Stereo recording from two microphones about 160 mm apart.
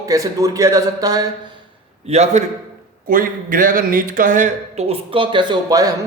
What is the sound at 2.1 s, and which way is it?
Speech, 40° right (ahead or behind).